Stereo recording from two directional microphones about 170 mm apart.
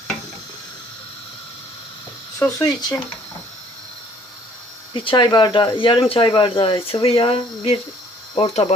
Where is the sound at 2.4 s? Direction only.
20° left (ahead or behind).